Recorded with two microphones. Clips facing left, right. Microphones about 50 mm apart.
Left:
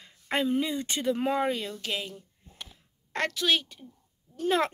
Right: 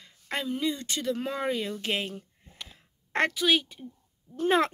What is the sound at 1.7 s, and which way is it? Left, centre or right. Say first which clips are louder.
Speech: right 3 dB; right.